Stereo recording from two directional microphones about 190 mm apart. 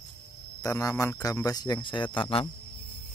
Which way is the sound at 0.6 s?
20° left (ahead or behind).